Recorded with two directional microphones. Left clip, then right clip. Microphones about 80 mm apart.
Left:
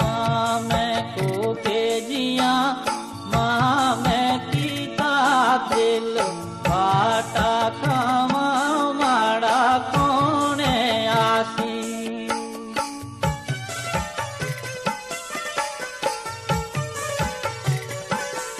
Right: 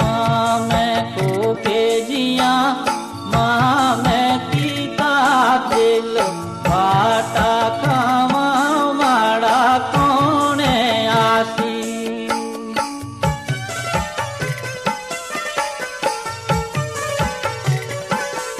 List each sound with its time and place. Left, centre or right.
0.0 s music: left